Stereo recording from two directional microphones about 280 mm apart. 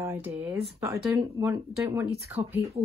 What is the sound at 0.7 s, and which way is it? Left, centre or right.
Speech, centre.